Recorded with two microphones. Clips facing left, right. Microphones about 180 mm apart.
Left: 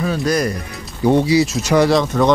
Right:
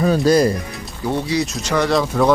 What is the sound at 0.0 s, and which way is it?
Speech, 35° right (ahead or behind).